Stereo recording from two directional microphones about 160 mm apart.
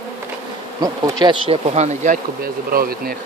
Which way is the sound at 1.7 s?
45° right (ahead or behind).